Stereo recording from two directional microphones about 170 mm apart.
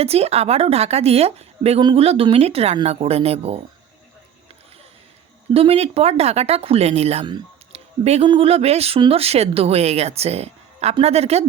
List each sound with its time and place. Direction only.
0.0 s speech: 35° right (ahead or behind)
5.5 s speech: 35° right (ahead or behind)